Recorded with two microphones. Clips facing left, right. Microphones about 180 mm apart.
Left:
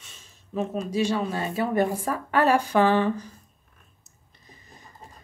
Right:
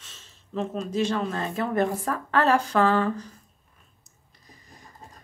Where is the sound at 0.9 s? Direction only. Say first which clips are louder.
Left 1 dB; 10° left (ahead or behind).